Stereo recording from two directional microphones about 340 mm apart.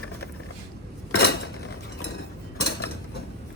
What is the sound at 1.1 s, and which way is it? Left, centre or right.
Cutlery, left.